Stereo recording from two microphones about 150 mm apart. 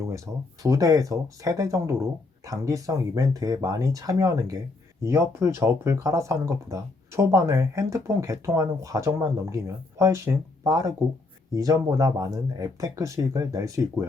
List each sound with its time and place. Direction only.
0.3 s speech: 15° right (ahead or behind)